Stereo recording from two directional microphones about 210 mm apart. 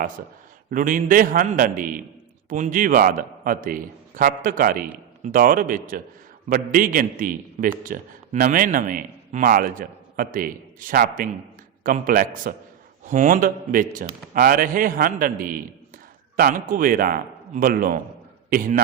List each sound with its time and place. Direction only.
0.7 s a man's voice: 40° right (ahead or behind)